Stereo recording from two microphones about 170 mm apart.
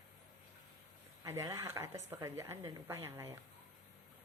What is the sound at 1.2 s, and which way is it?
A woman's voice, 20° right (ahead or behind).